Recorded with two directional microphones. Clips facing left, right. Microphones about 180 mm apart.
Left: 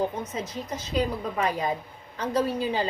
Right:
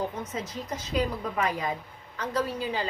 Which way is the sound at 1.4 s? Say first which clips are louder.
Left 2 dB; 30° left (ahead or behind).